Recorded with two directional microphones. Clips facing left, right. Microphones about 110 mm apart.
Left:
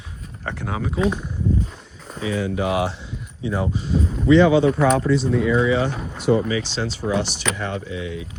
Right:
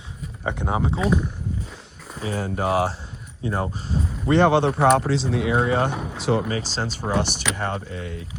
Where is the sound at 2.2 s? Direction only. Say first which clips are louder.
Left 2 dB; 40° right (ahead or behind); by 5.2 s 80° right.